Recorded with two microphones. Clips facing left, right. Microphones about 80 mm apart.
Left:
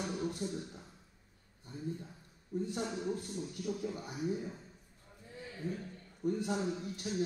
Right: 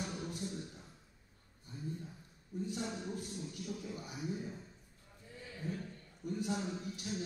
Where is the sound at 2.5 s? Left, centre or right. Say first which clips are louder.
Left 4 dB; left.